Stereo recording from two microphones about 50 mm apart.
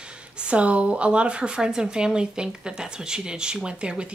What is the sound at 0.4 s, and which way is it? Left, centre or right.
Speech, right.